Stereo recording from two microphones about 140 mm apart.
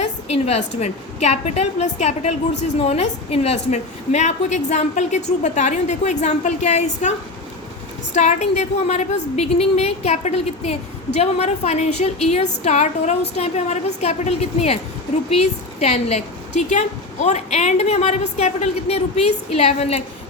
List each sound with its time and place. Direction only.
0.0 s a woman's voice: 50° left (ahead or behind)
8.1 s a woman's voice: 55° left (ahead or behind)